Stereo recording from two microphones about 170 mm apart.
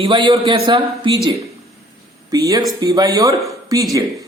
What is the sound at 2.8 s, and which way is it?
Speech, 20° right (ahead or behind).